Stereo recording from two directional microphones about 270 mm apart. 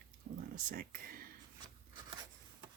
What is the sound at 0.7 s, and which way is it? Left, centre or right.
Speech, right.